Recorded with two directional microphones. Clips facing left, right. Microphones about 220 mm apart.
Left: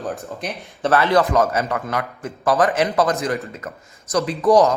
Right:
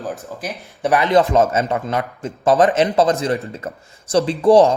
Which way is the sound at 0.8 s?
15° right (ahead or behind).